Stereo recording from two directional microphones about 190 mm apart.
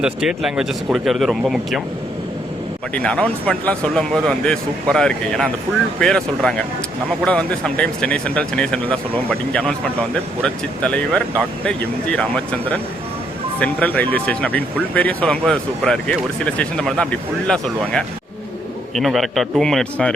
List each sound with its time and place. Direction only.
0.0 s speech: 5° right (ahead or behind)
2.9 s speech: 5° left (ahead or behind)